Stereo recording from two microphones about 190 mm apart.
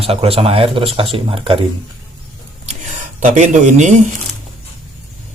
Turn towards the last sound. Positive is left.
turn(degrees=-40)  # may be behind; listen again after turning